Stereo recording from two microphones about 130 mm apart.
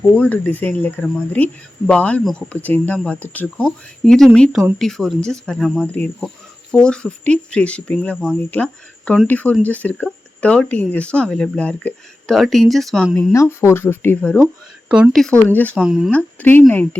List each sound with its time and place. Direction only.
0.0 s speech: 10° left (ahead or behind)
13.3 s speech: 20° left (ahead or behind)
14.3 s speech: 15° right (ahead or behind)
15.1 s speech: 5° left (ahead or behind)
15.4 s speech: 15° left (ahead or behind)
15.8 s speech: 5° right (ahead or behind)
16.1 s speech: 15° left (ahead or behind)